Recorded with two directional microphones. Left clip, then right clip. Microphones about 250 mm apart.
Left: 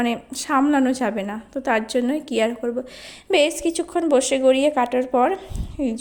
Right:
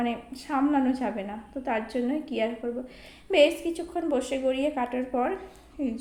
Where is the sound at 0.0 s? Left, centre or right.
Left.